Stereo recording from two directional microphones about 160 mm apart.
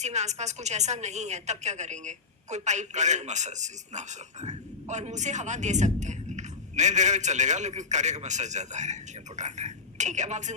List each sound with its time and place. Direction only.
0.0 s a woman's voice: 45° right (ahead or behind)